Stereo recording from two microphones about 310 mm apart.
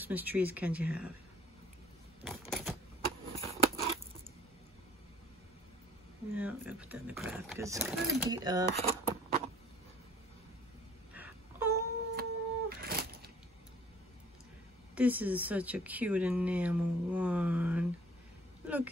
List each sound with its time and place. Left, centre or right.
0.0 s speech: centre
2.2 s typewriter: centre
3.3 s scissors: centre
6.3 s speech: centre
11.1 s a sound: centre
12.2 s a sound: right
15.0 s speech: centre